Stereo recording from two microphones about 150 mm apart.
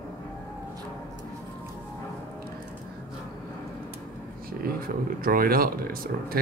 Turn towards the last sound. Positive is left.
turn(degrees=-75)  # may be behind; listen again after turning